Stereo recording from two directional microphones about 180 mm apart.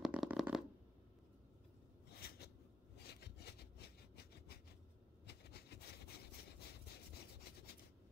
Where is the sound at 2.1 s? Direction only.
60° left (ahead or behind).